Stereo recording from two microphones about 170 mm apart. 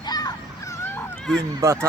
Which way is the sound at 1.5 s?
15° right (ahead or behind).